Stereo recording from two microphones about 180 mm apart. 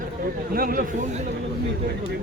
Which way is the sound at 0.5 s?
55° right (ahead or behind).